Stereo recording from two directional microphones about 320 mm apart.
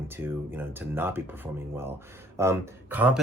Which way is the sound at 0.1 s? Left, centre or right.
Centre.